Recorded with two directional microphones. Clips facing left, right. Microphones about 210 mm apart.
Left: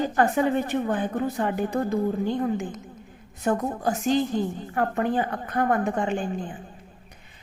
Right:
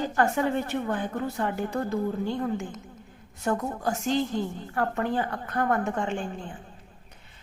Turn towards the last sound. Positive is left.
turn(degrees=15)  # may be behind; listen again after turning